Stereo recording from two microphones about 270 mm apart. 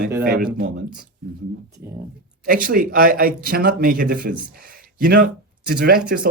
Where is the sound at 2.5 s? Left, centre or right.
Right.